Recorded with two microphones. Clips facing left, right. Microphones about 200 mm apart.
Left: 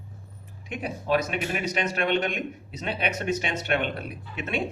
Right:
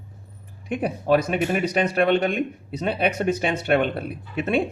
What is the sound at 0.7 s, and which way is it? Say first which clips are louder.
Speech: right 6 dB; 55° right (ahead or behind).